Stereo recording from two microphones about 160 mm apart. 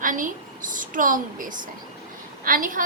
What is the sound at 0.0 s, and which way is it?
A woman's voice, 55° right (ahead or behind).